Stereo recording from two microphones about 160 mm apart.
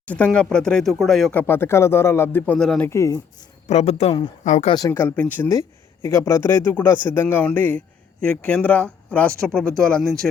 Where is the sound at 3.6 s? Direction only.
40° left (ahead or behind).